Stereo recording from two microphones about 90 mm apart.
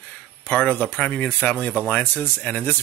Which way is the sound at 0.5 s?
15° left (ahead or behind).